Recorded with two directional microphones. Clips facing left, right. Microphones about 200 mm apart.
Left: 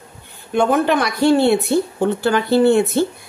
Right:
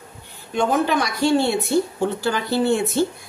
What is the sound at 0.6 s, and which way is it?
Speech, 60° left (ahead or behind).